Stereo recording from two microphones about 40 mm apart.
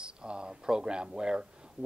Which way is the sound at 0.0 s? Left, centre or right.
Right.